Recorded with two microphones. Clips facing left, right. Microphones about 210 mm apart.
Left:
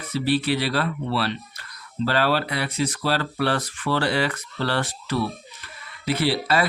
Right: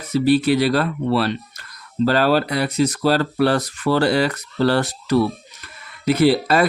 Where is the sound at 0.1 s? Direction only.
45° right (ahead or behind).